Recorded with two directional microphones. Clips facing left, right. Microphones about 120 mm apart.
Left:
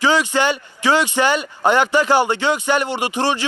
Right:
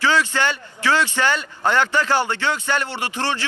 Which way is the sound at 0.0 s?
15° left (ahead or behind).